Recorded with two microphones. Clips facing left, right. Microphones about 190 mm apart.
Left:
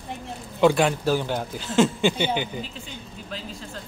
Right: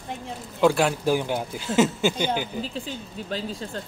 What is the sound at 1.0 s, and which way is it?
A man's voice, 15° right (ahead or behind).